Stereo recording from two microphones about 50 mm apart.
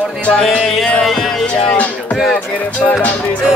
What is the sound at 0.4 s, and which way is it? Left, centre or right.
Music, centre.